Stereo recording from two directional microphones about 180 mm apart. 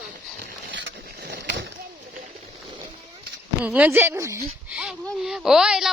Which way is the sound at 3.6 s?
10° right (ahead or behind).